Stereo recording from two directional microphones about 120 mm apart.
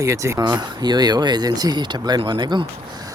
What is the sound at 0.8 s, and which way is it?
Speech, 35° right (ahead or behind).